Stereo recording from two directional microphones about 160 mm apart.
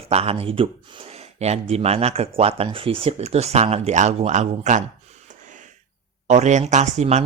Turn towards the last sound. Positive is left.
turn(degrees=-45)  # may be behind; listen again after turning